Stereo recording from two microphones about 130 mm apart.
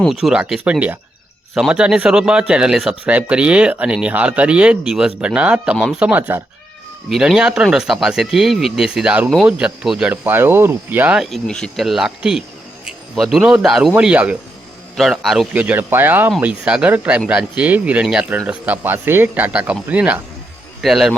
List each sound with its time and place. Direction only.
0.0 s speech: centre (ahead or behind)
10.1 s speech: 15° right (ahead or behind)
11.2 s a man's voice: 5° left (ahead or behind)